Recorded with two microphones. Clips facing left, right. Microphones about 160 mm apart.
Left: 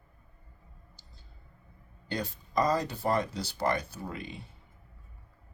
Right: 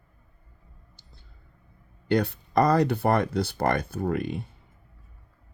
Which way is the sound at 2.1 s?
65° right (ahead or behind).